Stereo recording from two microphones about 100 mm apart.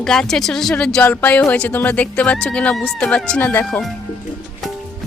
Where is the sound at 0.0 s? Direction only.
5° left (ahead or behind).